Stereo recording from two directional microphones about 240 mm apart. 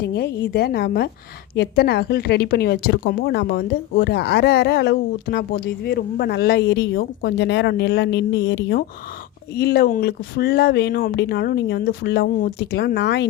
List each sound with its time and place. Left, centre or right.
0.0 s speech: left